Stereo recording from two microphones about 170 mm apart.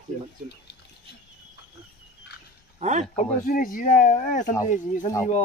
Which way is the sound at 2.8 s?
45° right (ahead or behind).